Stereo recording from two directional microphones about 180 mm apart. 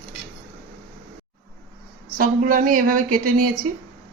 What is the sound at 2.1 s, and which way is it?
Speech, 50° right (ahead or behind).